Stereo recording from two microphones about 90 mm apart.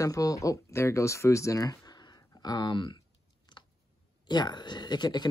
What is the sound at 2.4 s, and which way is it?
Speech, 50° left (ahead or behind).